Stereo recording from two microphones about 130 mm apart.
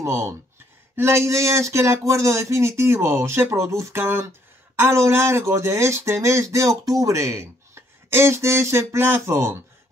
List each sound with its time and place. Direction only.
0.9 s speech: 20° right (ahead or behind)